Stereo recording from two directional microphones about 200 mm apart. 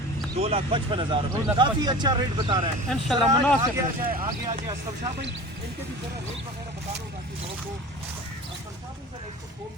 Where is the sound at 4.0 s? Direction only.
45° right (ahead or behind).